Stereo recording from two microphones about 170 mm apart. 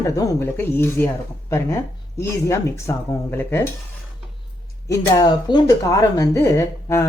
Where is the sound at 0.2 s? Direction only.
15° left (ahead or behind).